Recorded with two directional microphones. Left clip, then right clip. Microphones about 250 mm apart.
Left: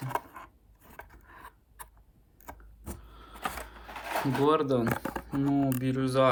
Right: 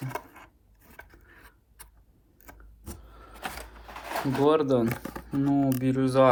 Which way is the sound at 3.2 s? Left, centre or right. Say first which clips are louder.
Left 1 dB; centre.